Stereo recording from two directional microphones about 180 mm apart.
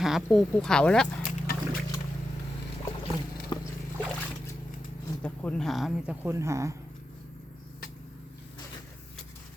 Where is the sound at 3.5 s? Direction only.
25° left (ahead or behind).